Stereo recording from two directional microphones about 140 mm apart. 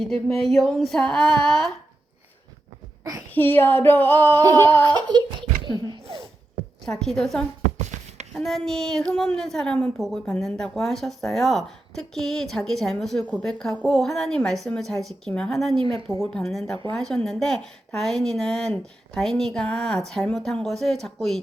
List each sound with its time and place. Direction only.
0.0 s a woman's voice: centre (ahead or behind)
3.0 s a child's voice: 25° right (ahead or behind)
3.3 s female singing: 15° left (ahead or behind)
4.4 s a sound: 25° right (ahead or behind)
6.8 s a woman's voice: 5° left (ahead or behind)
7.6 s a sound: 55° right (ahead or behind)
8.3 s a woman's voice: centre (ahead or behind)